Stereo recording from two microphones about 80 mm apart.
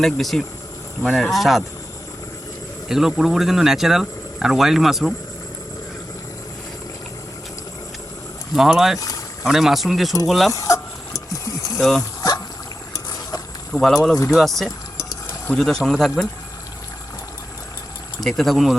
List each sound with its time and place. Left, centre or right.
0.0 s speech: centre
2.9 s speech: centre
8.5 s speech: centre
9.0 s vehicle: left
9.5 s speech: centre
10.5 s a sound: left
11.8 s speech: centre
13.8 s speech: centre
18.2 s speech: centre